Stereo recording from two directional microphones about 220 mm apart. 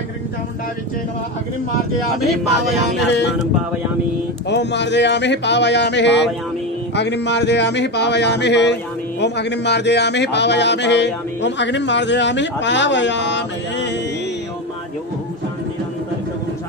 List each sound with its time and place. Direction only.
2.1 s speech: centre (ahead or behind)
4.5 s speech: 50° left (ahead or behind)